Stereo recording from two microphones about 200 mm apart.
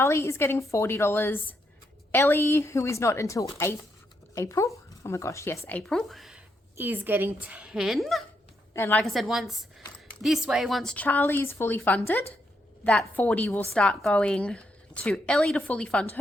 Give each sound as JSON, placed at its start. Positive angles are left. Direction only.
{"t": 0.0, "sound": "a woman's voice", "side_deg": 15}
{"t": 8.7, "sound": "a woman's voice", "side_deg": 10}